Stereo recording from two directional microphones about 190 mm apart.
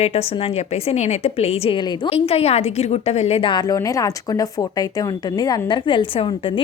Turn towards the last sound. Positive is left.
turn(degrees=25)  # may be behind; listen again after turning